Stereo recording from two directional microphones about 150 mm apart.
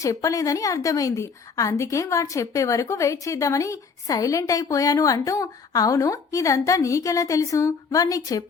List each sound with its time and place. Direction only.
0.0 s a woman's voice: 20° left (ahead or behind)